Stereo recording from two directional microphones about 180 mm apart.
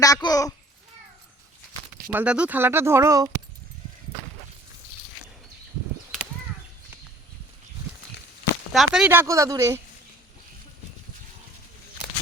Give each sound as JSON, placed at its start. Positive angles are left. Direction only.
{"t": 0.0, "sound": "a child's voice", "side_deg": 20}
{"t": 2.1, "sound": "speech", "side_deg": -5}
{"t": 8.7, "sound": "speech", "side_deg": 0}
{"t": 9.0, "sound": "speech", "side_deg": -15}